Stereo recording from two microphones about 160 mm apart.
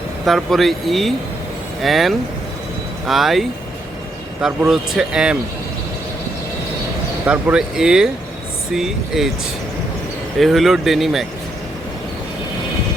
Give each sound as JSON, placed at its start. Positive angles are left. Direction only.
{"t": 0.3, "sound": "speech", "side_deg": 0}
{"t": 7.3, "sound": "speech", "side_deg": -5}
{"t": 10.4, "sound": "speech", "side_deg": 0}